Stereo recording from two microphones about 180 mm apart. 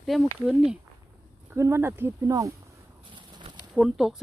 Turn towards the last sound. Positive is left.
turn(degrees=0)  # may be behind; listen again after turning